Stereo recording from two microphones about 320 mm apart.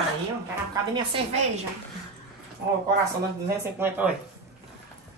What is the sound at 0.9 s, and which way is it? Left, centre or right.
Speech, centre.